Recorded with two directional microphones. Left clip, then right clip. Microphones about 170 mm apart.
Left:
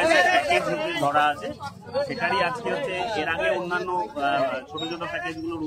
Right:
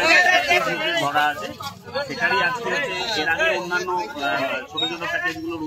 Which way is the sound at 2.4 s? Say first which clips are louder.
Right 4 dB; 15° left (ahead or behind).